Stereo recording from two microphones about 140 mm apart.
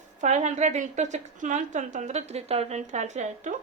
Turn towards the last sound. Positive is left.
turn(degrees=-60)  # may be behind; listen again after turning